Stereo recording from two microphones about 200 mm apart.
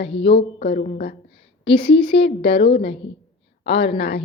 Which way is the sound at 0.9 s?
45° left (ahead or behind).